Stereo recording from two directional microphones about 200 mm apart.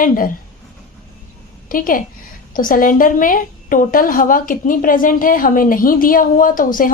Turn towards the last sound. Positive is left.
turn(degrees=45)  # may be behind; listen again after turning